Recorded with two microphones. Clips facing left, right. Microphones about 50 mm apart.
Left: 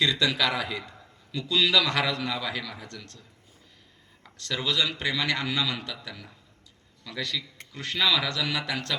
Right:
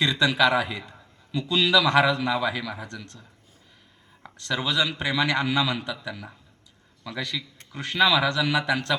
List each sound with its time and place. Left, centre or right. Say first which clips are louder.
0.0 s a man's voice: right 4 dB; right
4.2 s a man's voice: right 4 dB; right